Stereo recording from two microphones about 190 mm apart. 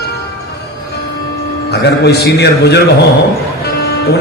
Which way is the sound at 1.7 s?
60° left (ahead or behind).